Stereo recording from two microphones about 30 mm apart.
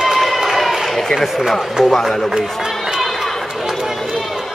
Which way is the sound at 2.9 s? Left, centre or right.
Centre.